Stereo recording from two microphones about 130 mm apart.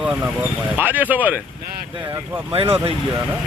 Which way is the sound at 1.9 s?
35° right (ahead or behind).